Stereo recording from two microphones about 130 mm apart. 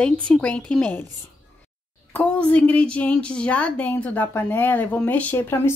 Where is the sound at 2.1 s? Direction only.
10° left (ahead or behind).